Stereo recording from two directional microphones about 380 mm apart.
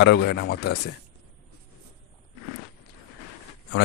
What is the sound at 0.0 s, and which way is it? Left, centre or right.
Speech, left.